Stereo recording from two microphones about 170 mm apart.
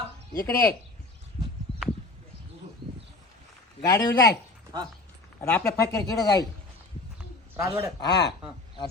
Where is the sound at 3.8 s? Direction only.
20° left (ahead or behind).